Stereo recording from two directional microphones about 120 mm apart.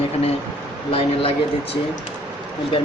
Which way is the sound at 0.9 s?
55° left (ahead or behind).